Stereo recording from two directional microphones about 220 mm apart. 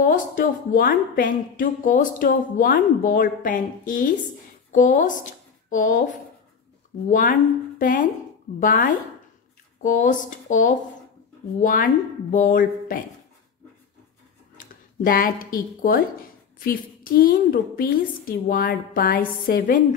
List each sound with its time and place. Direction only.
0.0 s a woman's voice: 35° left (ahead or behind)
14.6 s a woman's voice: 40° left (ahead or behind)